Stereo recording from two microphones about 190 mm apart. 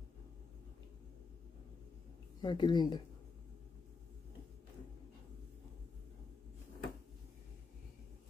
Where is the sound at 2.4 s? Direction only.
25° left (ahead or behind).